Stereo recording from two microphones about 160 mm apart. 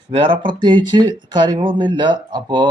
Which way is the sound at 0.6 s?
30° right (ahead or behind).